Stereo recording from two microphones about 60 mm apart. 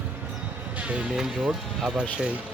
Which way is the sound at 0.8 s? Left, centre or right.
Right.